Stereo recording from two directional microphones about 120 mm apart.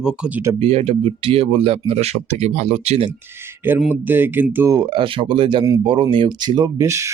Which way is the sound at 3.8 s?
15° right (ahead or behind).